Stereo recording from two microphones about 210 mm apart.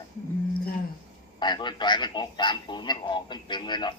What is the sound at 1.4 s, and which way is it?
A man's voice, 20° left (ahead or behind).